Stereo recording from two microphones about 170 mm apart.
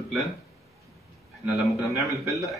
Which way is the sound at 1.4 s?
Centre (ahead or behind).